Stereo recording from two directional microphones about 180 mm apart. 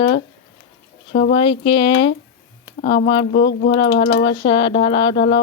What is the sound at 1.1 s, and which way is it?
Speech, 65° left (ahead or behind).